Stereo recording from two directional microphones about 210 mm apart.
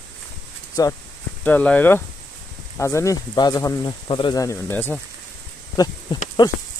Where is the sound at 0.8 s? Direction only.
15° left (ahead or behind).